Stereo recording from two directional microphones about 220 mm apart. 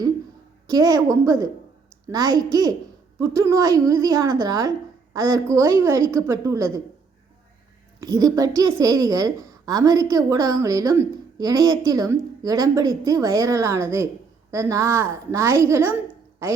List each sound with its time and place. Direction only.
0.7 s a woman's voice: 15° right (ahead or behind)
8.0 s a woman's voice: 15° right (ahead or behind)